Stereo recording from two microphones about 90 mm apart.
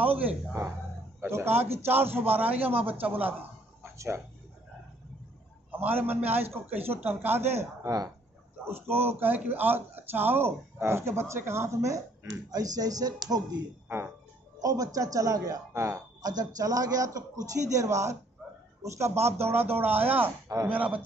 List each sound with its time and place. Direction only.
0.0 s speech: 20° right (ahead or behind)
3.8 s music: 30° right (ahead or behind)
5.7 s speech: 20° right (ahead or behind)
7.8 s speech: 45° right (ahead or behind)
8.6 s speech: 25° right (ahead or behind)
12.3 s speech: 45° right (ahead or behind)
13.8 s speech: 25° right (ahead or behind)
14.6 s a man's voice: 40° right (ahead or behind)
18.4 s a sound: 10° right (ahead or behind)
18.8 s a man's voice: 30° right (ahead or behind); by 21.0 s 15° right (ahead or behind)